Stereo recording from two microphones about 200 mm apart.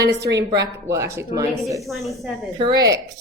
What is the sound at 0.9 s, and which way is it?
Speech, 15° right (ahead or behind).